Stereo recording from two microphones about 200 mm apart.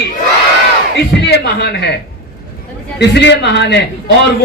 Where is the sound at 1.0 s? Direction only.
55° left (ahead or behind).